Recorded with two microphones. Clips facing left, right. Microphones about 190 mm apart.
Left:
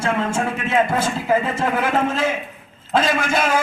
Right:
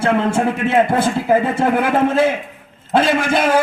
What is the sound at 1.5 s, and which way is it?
Speech, 60° right (ahead or behind).